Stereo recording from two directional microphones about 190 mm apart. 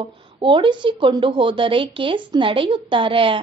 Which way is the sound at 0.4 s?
25° right (ahead or behind).